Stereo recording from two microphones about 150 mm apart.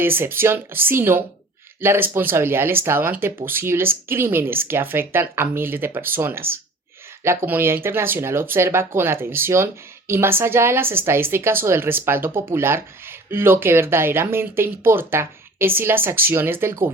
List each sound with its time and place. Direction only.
0.0 s a woman's voice: 15° right (ahead or behind)